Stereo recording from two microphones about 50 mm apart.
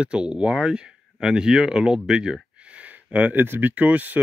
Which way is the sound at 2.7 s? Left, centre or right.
Right.